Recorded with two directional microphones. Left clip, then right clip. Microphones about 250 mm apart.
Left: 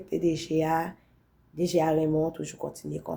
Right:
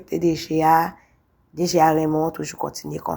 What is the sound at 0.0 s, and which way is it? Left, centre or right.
Speech, centre.